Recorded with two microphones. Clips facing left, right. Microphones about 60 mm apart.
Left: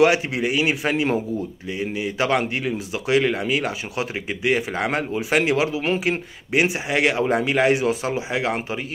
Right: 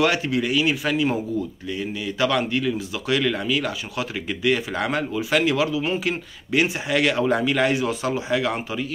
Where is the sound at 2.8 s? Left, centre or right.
Left.